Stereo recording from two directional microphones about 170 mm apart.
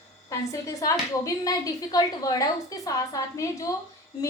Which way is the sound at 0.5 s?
20° left (ahead or behind).